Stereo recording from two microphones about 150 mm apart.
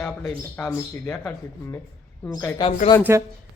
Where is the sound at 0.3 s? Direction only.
15° left (ahead or behind).